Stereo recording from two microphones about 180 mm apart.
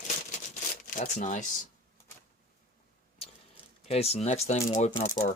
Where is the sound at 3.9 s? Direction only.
35° left (ahead or behind).